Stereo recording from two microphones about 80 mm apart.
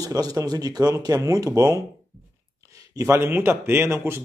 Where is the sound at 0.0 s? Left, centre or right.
Right.